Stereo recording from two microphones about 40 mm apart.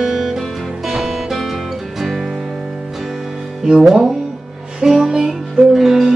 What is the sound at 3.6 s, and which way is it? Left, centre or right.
Music, centre.